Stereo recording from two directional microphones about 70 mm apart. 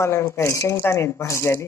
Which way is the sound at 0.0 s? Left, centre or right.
Left.